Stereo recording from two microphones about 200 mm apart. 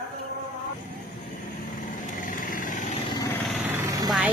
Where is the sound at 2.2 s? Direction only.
40° left (ahead or behind).